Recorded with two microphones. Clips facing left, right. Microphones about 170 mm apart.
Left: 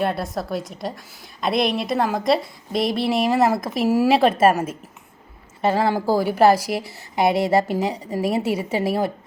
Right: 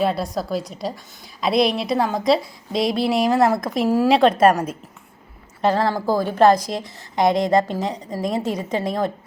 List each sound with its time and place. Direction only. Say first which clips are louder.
0.0 s a woman's voice: right 2 dB; centre (ahead or behind)